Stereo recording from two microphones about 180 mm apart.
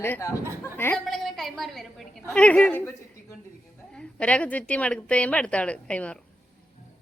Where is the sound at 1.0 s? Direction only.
Centre (ahead or behind).